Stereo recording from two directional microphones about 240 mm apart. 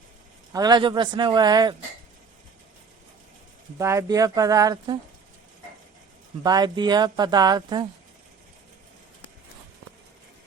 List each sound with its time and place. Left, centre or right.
0.5 s speech: centre
3.8 s speech: centre
6.4 s speech: centre